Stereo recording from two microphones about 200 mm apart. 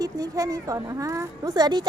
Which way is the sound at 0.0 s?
15° right (ahead or behind).